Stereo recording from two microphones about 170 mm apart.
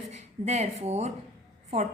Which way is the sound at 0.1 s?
40° right (ahead or behind).